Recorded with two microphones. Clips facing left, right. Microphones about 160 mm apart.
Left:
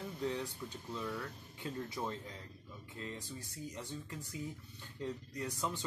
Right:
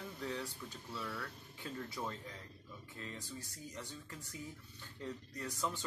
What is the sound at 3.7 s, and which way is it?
Speech, 15° left (ahead or behind).